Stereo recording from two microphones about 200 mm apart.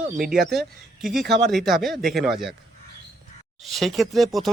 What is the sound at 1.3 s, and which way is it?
Speech, 55° right (ahead or behind).